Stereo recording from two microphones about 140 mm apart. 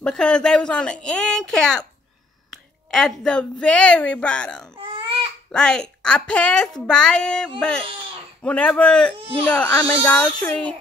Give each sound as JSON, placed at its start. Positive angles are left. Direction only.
{"t": 0.0, "sound": "a woman's voice", "side_deg": 5}
{"t": 4.7, "sound": "baby cry", "side_deg": -40}
{"t": 5.5, "sound": "a woman's voice", "side_deg": 5}
{"t": 9.7, "sound": "speech", "side_deg": 20}